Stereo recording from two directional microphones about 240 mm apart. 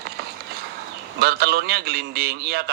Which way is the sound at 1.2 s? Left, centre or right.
Right.